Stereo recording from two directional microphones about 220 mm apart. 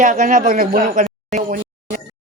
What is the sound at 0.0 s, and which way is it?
Speech, 35° right (ahead or behind).